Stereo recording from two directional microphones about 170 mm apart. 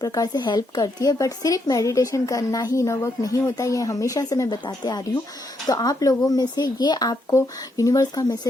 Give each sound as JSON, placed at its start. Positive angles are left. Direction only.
{"t": 0.0, "sound": "speech", "side_deg": 20}